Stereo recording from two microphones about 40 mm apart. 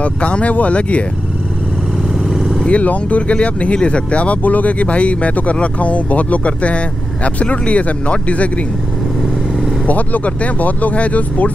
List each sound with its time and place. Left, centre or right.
0.0 s speech: left
2.1 s vehicle: centre
2.7 s speech: left
4.4 s speech: left
9.8 s speech: left